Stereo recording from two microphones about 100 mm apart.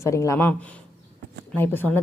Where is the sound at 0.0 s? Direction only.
30° left (ahead or behind).